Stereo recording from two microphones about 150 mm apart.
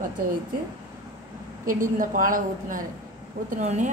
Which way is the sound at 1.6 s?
65° right (ahead or behind).